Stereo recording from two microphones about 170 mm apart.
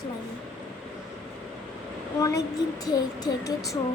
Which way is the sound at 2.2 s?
20° left (ahead or behind).